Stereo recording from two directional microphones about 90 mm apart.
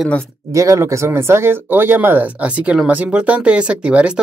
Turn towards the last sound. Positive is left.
turn(degrees=-10)  # may be behind; listen again after turning